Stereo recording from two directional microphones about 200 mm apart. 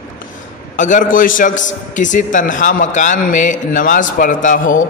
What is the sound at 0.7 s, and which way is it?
A man's voice, 40° left (ahead or behind).